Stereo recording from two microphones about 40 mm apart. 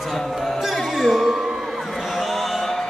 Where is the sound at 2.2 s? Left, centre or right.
Centre.